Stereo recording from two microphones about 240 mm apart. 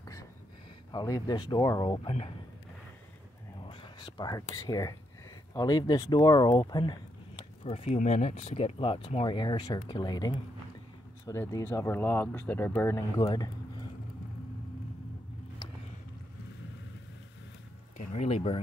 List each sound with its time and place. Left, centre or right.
0.0 s a sound: centre
0.9 s speech: centre
3.6 s whispering: centre
4.6 s speech: centre
17.9 s speech: left